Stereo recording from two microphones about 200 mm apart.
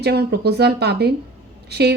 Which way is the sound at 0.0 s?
55° right (ahead or behind).